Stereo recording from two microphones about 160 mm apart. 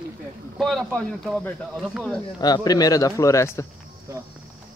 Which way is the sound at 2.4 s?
25° left (ahead or behind).